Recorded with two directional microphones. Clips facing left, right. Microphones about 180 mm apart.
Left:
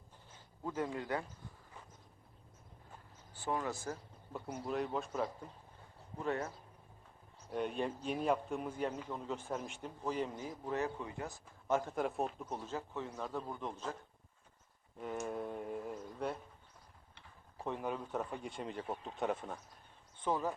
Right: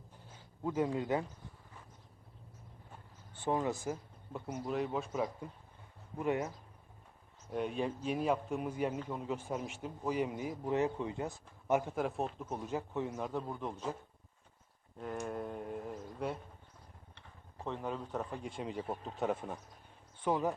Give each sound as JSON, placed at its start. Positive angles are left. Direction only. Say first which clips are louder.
{"t": 0.6, "sound": "a man's voice", "louder": "right 5 dB", "side_deg": -15}
{"t": 3.3, "sound": "speech", "louder": "right 4 dB", "side_deg": -25}
{"t": 4.3, "sound": "a man's voice", "louder": "right 2 dB", "side_deg": -5}
{"t": 7.5, "sound": "a man's voice", "louder": "right 2 dB", "side_deg": 0}
{"t": 11.9, "sound": "a man's voice", "louder": "right 1 dB", "side_deg": 0}
{"t": 14.9, "sound": "speech", "louder": "right 1 dB", "side_deg": 5}
{"t": 17.2, "sound": "a man's voice", "louder": "even", "side_deg": 10}